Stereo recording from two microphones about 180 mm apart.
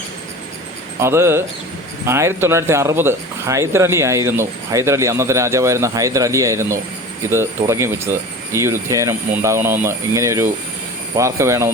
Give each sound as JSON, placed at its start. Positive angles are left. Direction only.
{"t": 0.9, "sound": "speech", "side_deg": -15}